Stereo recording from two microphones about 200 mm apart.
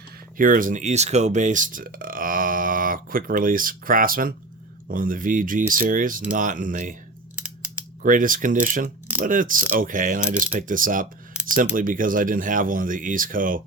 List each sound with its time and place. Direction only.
0.3 s speech: 45° right (ahead or behind)
8.0 s speech: 40° right (ahead or behind)
9.7 s mechanisms: 40° right (ahead or behind)
10.7 s speech: 40° right (ahead or behind)